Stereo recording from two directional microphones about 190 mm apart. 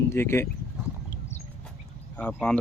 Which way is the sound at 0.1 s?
15° left (ahead or behind).